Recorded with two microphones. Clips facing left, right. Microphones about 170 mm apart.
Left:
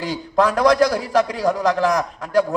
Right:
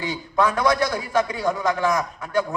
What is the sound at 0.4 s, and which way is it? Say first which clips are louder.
A man's voice: left 5 dB; 35° left (ahead or behind).